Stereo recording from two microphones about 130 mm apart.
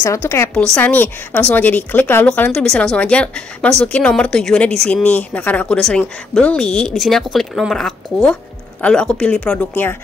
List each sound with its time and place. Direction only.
0.0 s a woman's voice: 20° left (ahead or behind)